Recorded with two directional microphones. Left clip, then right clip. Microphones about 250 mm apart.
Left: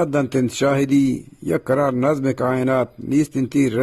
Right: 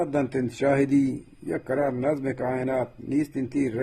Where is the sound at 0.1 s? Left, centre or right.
Left.